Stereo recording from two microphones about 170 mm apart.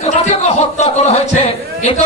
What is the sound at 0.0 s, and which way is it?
A man's voice, 35° left (ahead or behind).